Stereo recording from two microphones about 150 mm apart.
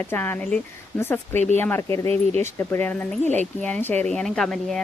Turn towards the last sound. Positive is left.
turn(degrees=0)  # may be behind; listen again after turning